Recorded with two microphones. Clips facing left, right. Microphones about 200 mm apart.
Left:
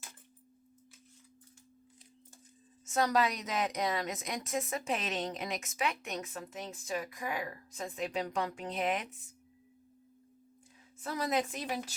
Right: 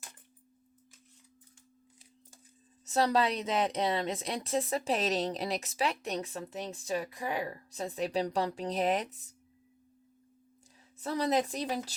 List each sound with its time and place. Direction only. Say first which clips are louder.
2.8 s a woman's voice: right 2 dB; 30° right (ahead or behind)
11.0 s a woman's voice: right 4 dB; 30° right (ahead or behind)